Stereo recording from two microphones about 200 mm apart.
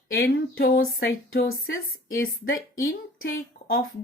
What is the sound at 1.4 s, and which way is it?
A woman's voice, 50° left (ahead or behind).